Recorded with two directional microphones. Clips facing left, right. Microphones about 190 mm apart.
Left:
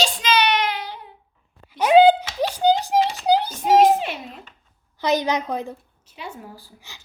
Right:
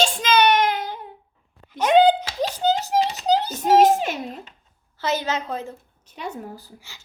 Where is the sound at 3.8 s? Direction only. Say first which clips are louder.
Even; 45° right (ahead or behind).